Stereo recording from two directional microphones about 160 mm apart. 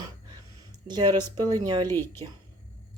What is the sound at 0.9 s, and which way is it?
Speech, 25° right (ahead or behind).